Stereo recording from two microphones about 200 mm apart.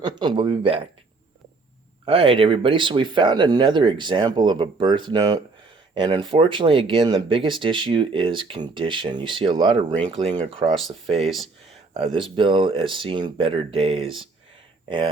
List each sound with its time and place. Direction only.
0.0 s speech: 20° right (ahead or behind)
2.0 s speech: 25° right (ahead or behind)
11.2 s a sound: centre (ahead or behind)
11.9 s speech: 25° right (ahead or behind)